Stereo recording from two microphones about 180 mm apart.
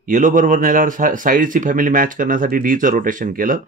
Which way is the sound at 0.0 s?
45° right (ahead or behind).